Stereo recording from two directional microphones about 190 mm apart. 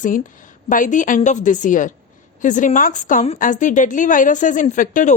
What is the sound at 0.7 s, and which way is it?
A woman's voice, 45° left (ahead or behind).